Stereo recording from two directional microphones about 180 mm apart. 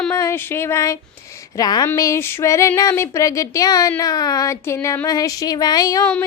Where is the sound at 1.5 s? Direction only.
20° left (ahead or behind).